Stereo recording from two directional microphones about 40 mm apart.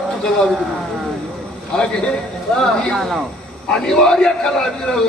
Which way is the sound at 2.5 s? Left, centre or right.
Centre.